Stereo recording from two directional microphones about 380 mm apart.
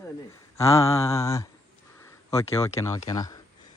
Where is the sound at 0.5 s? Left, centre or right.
Centre.